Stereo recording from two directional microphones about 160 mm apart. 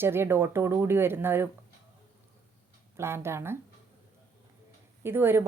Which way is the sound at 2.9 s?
15° right (ahead or behind).